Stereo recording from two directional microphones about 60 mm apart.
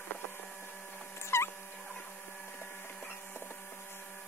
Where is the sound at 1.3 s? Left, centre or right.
Left.